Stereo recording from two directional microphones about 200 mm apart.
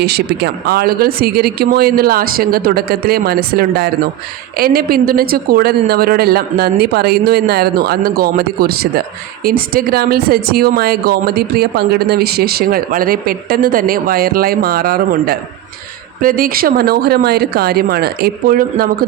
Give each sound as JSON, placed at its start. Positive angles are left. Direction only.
{"t": 0.0, "sound": "a man's voice", "side_deg": -55}